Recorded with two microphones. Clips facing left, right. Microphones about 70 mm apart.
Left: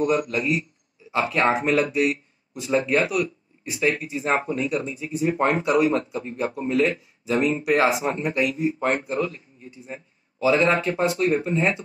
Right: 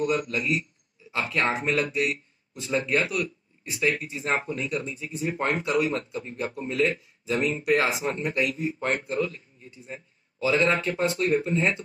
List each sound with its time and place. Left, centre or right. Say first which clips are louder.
0.0 s a man's voice: left 4 dB; left